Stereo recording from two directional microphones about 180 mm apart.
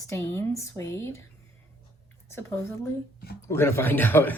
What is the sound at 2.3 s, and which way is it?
A woman's voice, 15° left (ahead or behind).